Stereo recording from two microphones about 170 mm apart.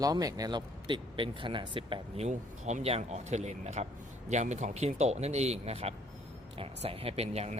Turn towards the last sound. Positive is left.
turn(degrees=-35)  # may be behind; listen again after turning